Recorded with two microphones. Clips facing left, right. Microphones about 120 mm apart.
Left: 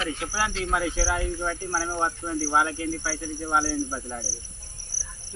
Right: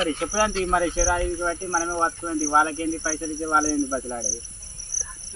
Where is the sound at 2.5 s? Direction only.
40° right (ahead or behind).